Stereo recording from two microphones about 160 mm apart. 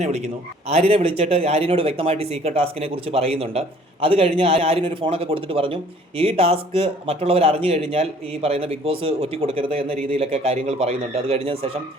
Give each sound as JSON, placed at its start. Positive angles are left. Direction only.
{"t": 0.7, "sound": "a man's voice", "side_deg": -40}